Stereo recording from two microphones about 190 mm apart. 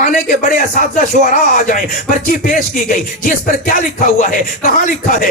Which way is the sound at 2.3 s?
45° left (ahead or behind).